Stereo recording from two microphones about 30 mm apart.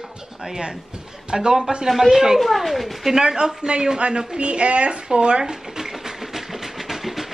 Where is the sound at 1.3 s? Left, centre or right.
Right.